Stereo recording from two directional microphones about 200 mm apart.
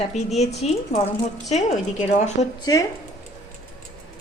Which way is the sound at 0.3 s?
35° left (ahead or behind).